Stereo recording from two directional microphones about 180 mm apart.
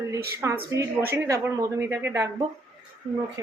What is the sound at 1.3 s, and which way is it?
Speech, 15° right (ahead or behind).